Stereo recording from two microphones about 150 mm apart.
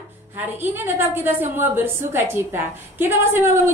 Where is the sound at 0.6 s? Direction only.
15° right (ahead or behind).